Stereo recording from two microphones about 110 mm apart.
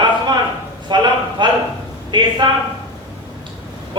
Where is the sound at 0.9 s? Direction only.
45° right (ahead or behind).